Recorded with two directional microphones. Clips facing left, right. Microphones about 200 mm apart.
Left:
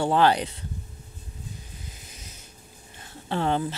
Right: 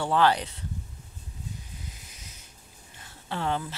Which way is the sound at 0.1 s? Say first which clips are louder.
Left 1 dB; 20° left (ahead or behind).